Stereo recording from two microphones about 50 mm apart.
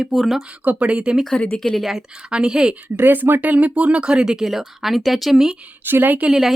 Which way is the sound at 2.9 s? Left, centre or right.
Right.